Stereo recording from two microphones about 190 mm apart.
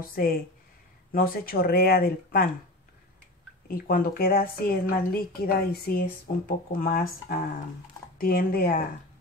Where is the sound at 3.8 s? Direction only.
50° left (ahead or behind).